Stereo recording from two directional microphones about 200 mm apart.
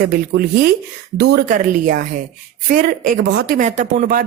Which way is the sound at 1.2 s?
55° right (ahead or behind).